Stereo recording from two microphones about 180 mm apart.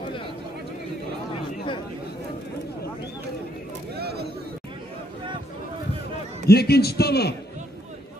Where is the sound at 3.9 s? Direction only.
60° right (ahead or behind).